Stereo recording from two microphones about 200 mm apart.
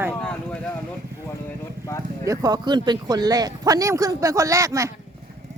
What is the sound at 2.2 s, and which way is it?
Speech, 15° right (ahead or behind).